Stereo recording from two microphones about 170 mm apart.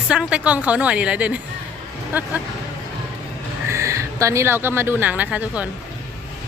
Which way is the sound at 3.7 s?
15° right (ahead or behind).